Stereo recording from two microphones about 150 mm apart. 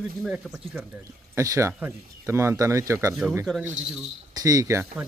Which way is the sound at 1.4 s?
20° right (ahead or behind).